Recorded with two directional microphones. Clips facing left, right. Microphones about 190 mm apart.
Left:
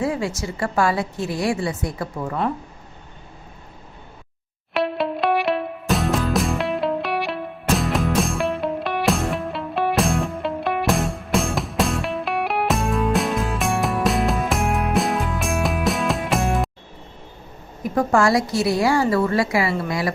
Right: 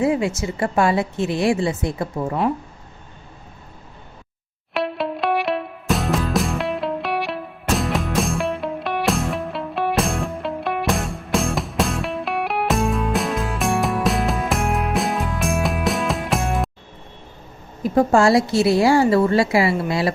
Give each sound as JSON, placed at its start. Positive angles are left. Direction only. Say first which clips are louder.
{"t": 0.0, "sound": "a woman's voice", "louder": "right 4 dB", "side_deg": -20}
{"t": 4.7, "sound": "music", "louder": "left 1 dB", "side_deg": 0}
{"t": 17.8, "sound": "a woman's voice", "louder": "right 3 dB", "side_deg": -25}